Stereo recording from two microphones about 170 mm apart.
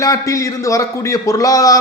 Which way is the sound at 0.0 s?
20° left (ahead or behind).